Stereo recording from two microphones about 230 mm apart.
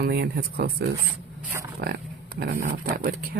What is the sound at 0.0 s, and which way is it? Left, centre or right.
Speech, right.